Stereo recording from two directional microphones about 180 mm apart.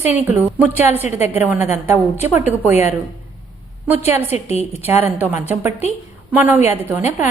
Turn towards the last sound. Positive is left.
turn(degrees=-10)  # may be behind; listen again after turning